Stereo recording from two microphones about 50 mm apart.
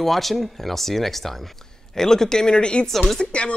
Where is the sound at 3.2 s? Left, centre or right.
Left.